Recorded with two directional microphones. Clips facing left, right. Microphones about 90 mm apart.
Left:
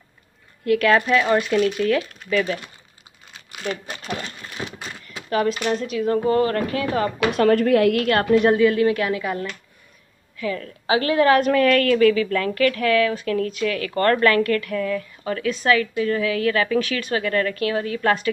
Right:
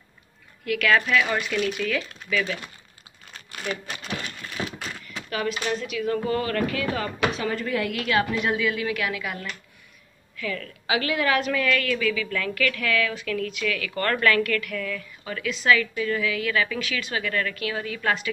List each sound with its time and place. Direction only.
0.7 s a woman's voice: 35° left (ahead or behind)
5.3 s a woman's voice: 35° left (ahead or behind)
7.3 s a woman's voice: 60° left (ahead or behind); by 18.3 s 40° left (ahead or behind)